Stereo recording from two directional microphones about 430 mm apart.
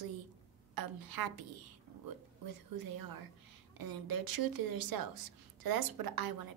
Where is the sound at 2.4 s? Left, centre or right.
Right.